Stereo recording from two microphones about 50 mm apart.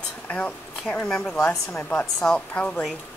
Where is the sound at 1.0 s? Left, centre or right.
Centre.